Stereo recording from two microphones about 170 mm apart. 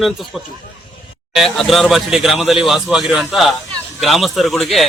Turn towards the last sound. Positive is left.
turn(degrees=0)  # may be behind; listen again after turning